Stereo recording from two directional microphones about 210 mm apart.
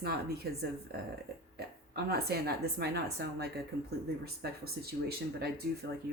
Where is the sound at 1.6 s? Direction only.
50° right (ahead or behind).